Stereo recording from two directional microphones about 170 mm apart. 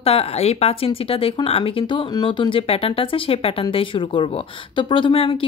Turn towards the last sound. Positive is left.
turn(degrees=35)  # may be behind; listen again after turning